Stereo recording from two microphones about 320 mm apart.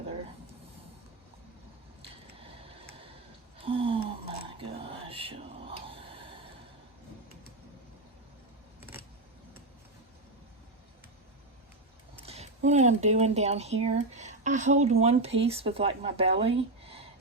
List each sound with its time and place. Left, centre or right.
2.0 s scissors: centre
3.6 s a sound: centre
12.2 s speech: centre